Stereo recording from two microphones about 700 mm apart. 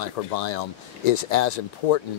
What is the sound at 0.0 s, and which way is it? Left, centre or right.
Speech, left.